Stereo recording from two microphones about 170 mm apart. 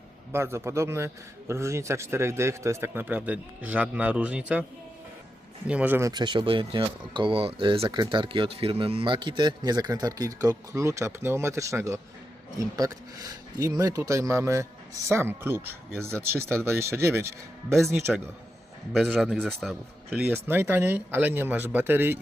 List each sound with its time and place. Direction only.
0.3 s speech: 15° right (ahead or behind)
5.6 s speech: 10° right (ahead or behind)
18.9 s speech: centre (ahead or behind)
20.1 s speech: 10° right (ahead or behind)